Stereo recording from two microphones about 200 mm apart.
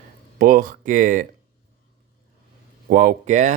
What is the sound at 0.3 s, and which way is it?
Speech, 45° right (ahead or behind).